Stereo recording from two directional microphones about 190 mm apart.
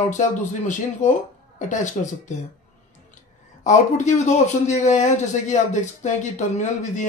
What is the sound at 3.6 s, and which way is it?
A man's voice, 40° left (ahead or behind).